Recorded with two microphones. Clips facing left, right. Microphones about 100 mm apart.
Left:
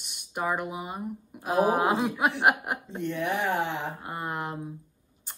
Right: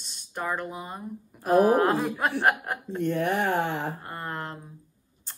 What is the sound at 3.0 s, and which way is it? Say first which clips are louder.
Speech: right 4 dB; 50° right (ahead or behind).